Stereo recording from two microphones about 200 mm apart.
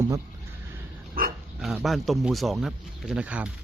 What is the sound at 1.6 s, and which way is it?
Speech, centre (ahead or behind).